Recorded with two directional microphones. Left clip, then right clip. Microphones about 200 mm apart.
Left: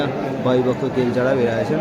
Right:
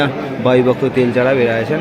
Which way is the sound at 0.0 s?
25° right (ahead or behind).